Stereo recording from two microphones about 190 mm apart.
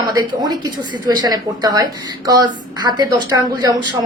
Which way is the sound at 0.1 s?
20° right (ahead or behind).